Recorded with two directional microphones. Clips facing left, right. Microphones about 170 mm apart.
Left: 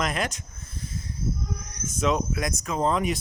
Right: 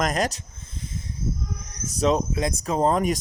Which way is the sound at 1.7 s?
35° right (ahead or behind).